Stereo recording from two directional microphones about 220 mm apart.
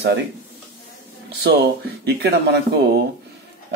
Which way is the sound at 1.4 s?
45° right (ahead or behind).